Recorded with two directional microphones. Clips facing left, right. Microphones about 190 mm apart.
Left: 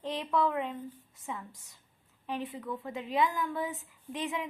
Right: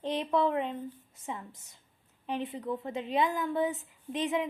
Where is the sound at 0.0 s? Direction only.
20° right (ahead or behind).